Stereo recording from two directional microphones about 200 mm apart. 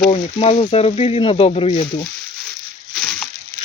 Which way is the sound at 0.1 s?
30° left (ahead or behind).